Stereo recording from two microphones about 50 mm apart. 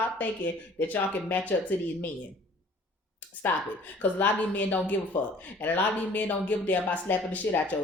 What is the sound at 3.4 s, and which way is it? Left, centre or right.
Speech, left.